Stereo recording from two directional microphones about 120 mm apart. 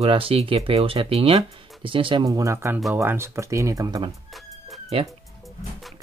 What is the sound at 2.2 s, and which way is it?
Speech, 25° right (ahead or behind).